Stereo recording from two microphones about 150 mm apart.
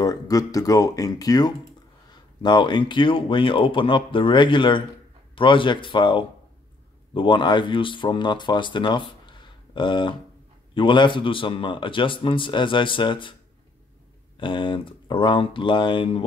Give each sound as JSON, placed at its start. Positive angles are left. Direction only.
{"t": 0.0, "sound": "a man's voice", "side_deg": 25}
{"t": 14.4, "sound": "a man's voice", "side_deg": 35}